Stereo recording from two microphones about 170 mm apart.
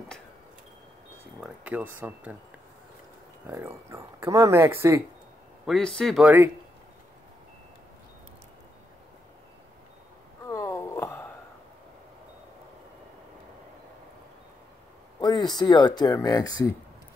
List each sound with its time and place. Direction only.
1.4 s speech: 5° right (ahead or behind)
3.4 s speech: 15° right (ahead or behind)
5.7 s speech: 5° left (ahead or behind)
10.4 s a sound: 20° left (ahead or behind)
15.1 s speech: 25° left (ahead or behind)